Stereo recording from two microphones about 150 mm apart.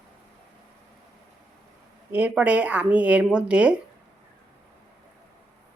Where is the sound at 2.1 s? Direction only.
10° right (ahead or behind).